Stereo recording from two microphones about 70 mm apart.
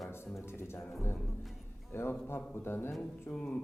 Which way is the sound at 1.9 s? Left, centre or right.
Left.